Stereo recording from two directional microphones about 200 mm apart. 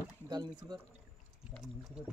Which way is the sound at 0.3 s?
20° right (ahead or behind).